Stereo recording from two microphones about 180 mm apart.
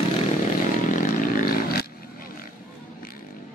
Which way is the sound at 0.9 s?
45° left (ahead or behind).